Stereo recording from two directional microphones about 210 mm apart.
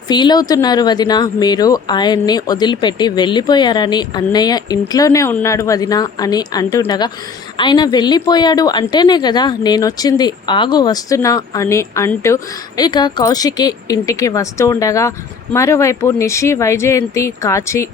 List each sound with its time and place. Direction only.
0.1 s a woman's voice: 20° left (ahead or behind)